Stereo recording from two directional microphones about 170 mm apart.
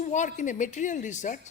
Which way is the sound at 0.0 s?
45° left (ahead or behind).